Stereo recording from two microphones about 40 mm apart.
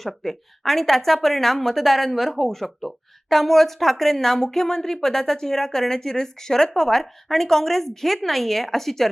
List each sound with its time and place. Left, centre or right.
0.0 s speech: centre